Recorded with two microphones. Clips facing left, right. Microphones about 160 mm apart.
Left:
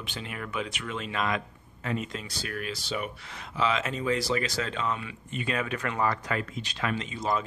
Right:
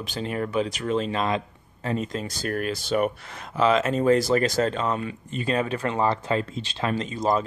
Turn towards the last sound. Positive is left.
turn(degrees=-40)  # may be behind; listen again after turning